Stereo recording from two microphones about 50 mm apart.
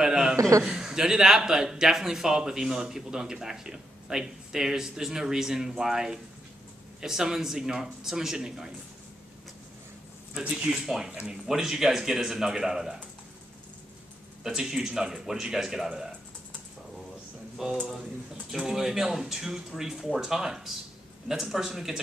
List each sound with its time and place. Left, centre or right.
0.0 s a sound: centre
0.4 s a man's voice: right
0.7 s speech: centre
10.3 s speech: centre
14.4 s speech: centre
17.6 s speech: centre